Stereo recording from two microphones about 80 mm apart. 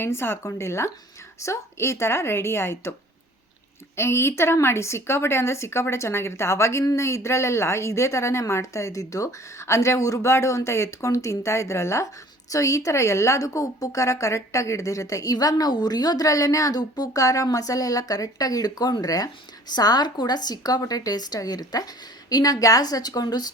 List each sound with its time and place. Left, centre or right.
0.0 s a woman's voice: left
3.9 s a woman's voice: left